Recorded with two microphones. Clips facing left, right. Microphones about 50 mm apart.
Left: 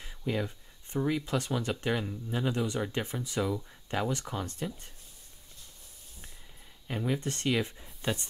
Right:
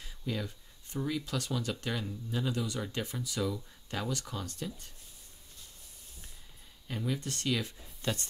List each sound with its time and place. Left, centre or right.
0.0 s speech: left
6.9 s speech: left